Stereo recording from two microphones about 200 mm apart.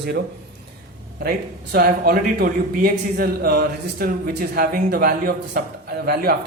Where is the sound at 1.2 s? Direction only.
50° right (ahead or behind).